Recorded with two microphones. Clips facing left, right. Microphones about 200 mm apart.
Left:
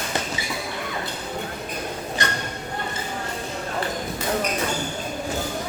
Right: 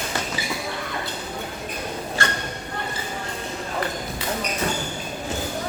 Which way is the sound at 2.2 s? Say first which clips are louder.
Right 1 dB; 20° left (ahead or behind).